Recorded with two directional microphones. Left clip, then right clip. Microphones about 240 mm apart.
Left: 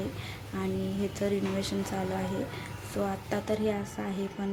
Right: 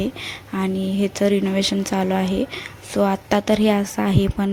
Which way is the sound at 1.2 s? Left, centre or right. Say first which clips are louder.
Right 12 dB; right.